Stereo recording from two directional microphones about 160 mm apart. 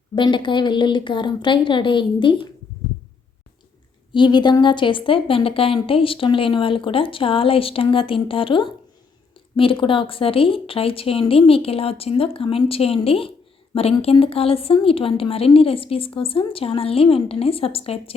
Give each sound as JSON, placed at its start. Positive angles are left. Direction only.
{"t": 0.2, "sound": "speech", "side_deg": 30}
{"t": 4.1, "sound": "a woman's voice", "side_deg": 30}